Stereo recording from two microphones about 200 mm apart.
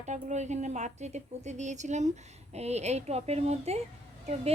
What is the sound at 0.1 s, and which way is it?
A woman's voice, 35° right (ahead or behind).